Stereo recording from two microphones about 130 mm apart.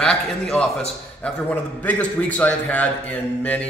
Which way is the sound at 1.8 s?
10° left (ahead or behind).